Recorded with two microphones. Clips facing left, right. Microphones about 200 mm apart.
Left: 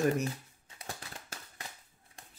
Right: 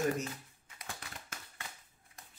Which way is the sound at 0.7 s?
30° left (ahead or behind).